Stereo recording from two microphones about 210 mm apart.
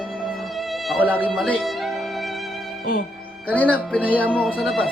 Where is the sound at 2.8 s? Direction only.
40° left (ahead or behind).